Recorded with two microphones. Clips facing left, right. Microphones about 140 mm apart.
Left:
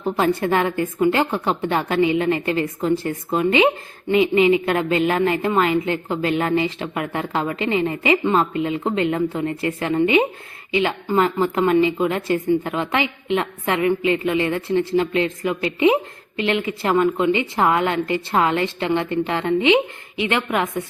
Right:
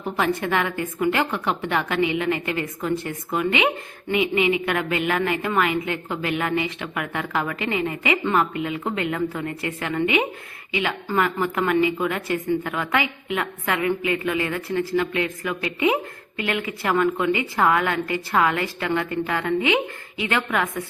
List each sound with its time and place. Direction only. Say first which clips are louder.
0.0 s a woman's voice: left 4 dB; 30° left (ahead or behind)